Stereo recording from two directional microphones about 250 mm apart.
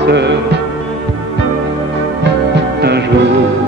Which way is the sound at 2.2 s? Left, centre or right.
Right.